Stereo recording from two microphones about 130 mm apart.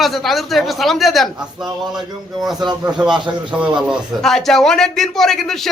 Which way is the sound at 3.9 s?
Centre (ahead or behind).